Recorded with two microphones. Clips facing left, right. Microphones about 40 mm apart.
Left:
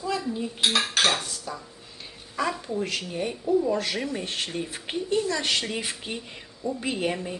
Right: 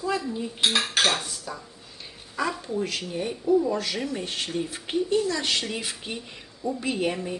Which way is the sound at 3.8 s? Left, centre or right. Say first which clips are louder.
Even; centre.